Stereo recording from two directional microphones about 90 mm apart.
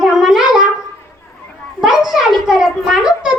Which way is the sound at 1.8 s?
5° right (ahead or behind).